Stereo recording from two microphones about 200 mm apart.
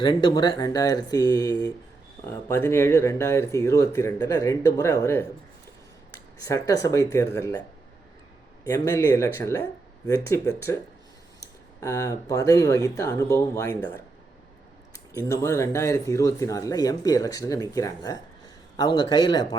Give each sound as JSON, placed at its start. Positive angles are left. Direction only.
{"t": 0.0, "sound": "speech", "side_deg": 25}
{"t": 6.4, "sound": "speech", "side_deg": 15}
{"t": 8.6, "sound": "speech", "side_deg": 15}
{"t": 15.3, "sound": "speech", "side_deg": 15}